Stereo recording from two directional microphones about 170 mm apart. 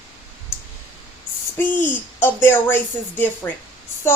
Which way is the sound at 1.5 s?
10° left (ahead or behind).